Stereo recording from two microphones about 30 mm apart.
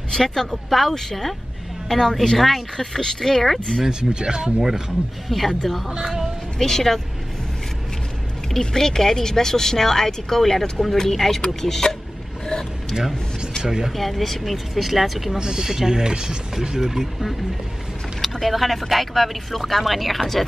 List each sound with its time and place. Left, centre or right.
0.1 s speech: centre
2.9 s speech: centre
4.1 s speech: right
4.6 s speech: centre
5.3 s speech: centre
5.9 s speech: centre
6.6 s speech: centre
8.5 s speech: centre
13.6 s speech: centre
13.9 s speech: centre
15.3 s speech: right
16.8 s speech: centre
18.2 s vehicle: centre
18.5 s speech: centre